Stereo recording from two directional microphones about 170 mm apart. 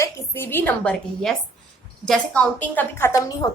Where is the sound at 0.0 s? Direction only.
15° left (ahead or behind).